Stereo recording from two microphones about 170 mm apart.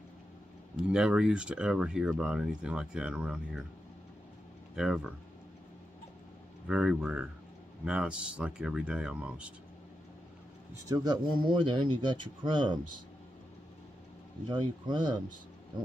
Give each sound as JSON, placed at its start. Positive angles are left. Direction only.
{"t": 0.7, "sound": "speech", "side_deg": -5}
{"t": 4.7, "sound": "speech", "side_deg": -5}
{"t": 6.7, "sound": "speech", "side_deg": -5}
{"t": 10.9, "sound": "speech", "side_deg": -25}
{"t": 14.5, "sound": "speech", "side_deg": -25}